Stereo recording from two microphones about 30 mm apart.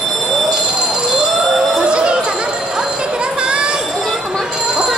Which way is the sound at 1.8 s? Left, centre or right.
Right.